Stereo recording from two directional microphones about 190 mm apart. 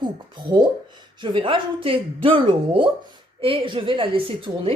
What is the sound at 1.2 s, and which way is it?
A woman's voice, 25° right (ahead or behind).